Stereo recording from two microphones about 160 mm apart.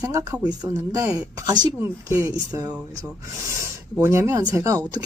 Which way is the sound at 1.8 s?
15° right (ahead or behind).